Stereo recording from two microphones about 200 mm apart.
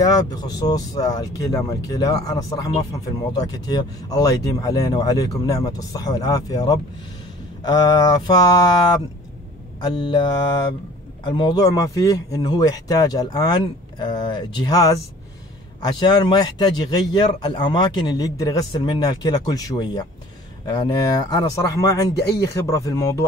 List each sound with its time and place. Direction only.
0.0 s speech: 20° left (ahead or behind)